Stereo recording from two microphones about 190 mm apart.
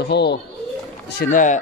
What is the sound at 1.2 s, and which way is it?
Speech, 45° left (ahead or behind).